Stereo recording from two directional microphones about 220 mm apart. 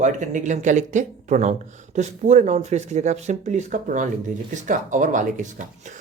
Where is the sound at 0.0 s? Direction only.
35° right (ahead or behind).